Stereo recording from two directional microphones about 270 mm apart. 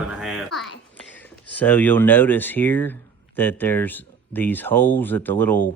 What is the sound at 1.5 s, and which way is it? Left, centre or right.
Speech, centre.